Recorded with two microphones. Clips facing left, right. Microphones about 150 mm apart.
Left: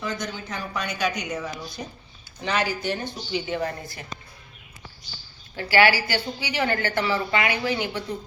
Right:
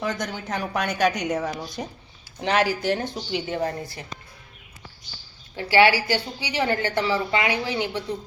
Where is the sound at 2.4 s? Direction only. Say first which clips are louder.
Right 4 dB; 75° right (ahead or behind); by 3.4 s 90° right.